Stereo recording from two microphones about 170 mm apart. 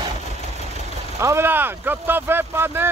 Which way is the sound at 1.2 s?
15° right (ahead or behind).